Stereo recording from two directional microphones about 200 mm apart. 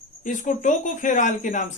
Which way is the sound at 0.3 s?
40° left (ahead or behind).